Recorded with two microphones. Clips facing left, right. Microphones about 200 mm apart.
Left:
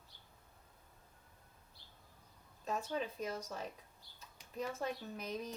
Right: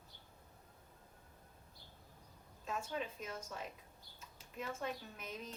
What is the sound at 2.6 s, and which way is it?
Speech, 40° left (ahead or behind).